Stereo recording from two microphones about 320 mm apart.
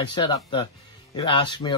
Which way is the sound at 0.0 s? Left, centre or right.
Centre.